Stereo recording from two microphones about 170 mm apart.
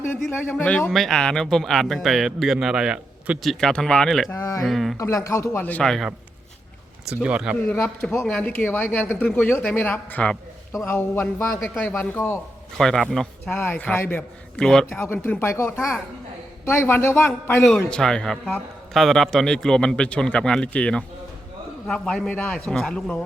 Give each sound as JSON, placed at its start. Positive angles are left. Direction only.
{"t": 0.0, "sound": "speech", "side_deg": 10}
{"t": 4.3, "sound": "a man's voice", "side_deg": 15}
{"t": 4.6, "sound": "speech", "side_deg": 0}
{"t": 4.9, "sound": "a man's voice", "side_deg": 20}
{"t": 7.7, "sound": "a man's voice", "side_deg": 5}